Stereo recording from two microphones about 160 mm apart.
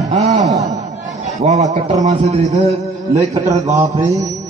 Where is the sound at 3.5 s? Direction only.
20° right (ahead or behind).